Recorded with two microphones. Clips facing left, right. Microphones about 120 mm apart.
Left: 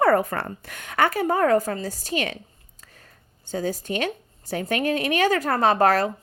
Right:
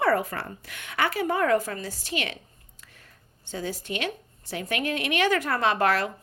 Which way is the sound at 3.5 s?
40° left (ahead or behind).